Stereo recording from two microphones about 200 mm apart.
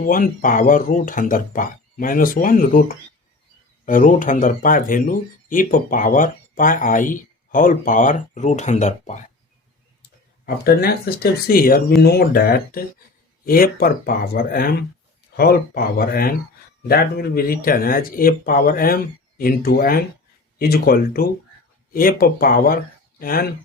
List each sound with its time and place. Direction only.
0.0 s speech: 45° left (ahead or behind)
3.8 s speech: 40° left (ahead or behind)
10.4 s speech: 50° left (ahead or behind)